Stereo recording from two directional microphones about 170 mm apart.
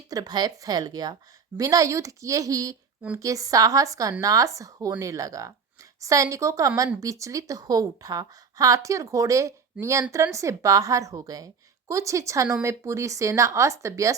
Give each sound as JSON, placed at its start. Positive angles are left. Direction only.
{"t": 0.1, "sound": "a woman's voice", "side_deg": -25}